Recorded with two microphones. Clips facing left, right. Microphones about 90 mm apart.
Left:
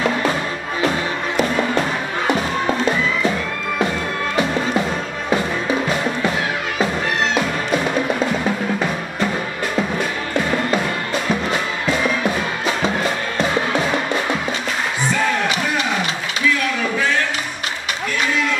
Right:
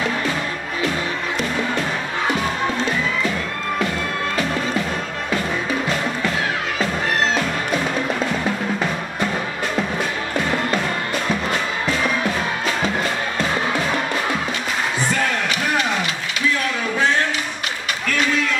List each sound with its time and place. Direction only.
5.3 s music: 20° left (ahead or behind)
7.3 s music: 10° left (ahead or behind)